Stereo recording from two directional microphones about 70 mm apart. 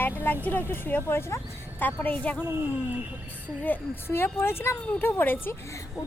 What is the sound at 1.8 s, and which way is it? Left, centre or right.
Speech, left.